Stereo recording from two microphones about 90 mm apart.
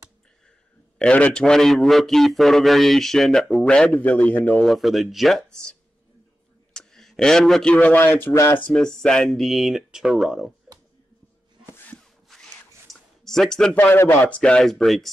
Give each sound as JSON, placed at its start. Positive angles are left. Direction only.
{"t": 0.9, "sound": "a man's voice", "side_deg": 10}
{"t": 4.6, "sound": "a man's voice", "side_deg": 0}
{"t": 6.7, "sound": "a sound", "side_deg": 5}
{"t": 7.7, "sound": "speech", "side_deg": 15}
{"t": 8.0, "sound": "speech", "side_deg": 25}
{"t": 8.6, "sound": "a man's voice", "side_deg": 10}
{"t": 12.3, "sound": "a sound", "side_deg": 5}
{"t": 13.2, "sound": "speech", "side_deg": 5}
{"t": 13.8, "sound": "speech", "side_deg": 25}
{"t": 14.4, "sound": "a man's voice", "side_deg": 5}